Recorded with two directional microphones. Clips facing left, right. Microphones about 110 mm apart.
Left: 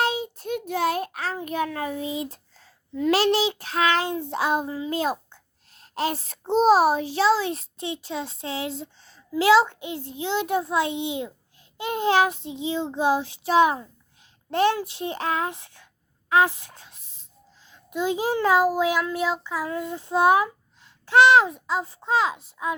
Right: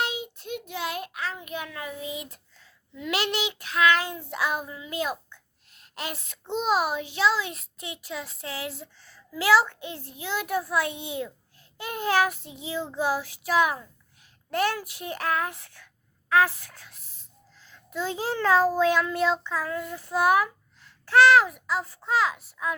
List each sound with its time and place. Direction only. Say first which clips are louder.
0.0 s a child's voice: left 6 dB; 40° left (ahead or behind); by 15.9 s 20° left (ahead or behind)
16.3 s a sound: left 2 dB; 20° left (ahead or behind)
17.7 s a child's voice: left 5 dB; 15° left (ahead or behind)